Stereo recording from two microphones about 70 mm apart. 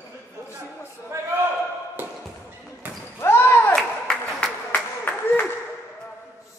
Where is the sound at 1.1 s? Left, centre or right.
Right.